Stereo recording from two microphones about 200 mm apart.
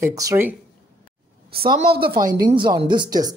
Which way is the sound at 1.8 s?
50° right (ahead or behind).